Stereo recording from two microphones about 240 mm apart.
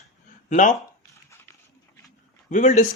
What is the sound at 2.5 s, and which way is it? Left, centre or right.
Speech, left.